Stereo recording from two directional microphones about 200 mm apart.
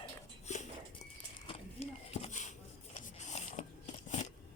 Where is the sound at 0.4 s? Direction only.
35° left (ahead or behind).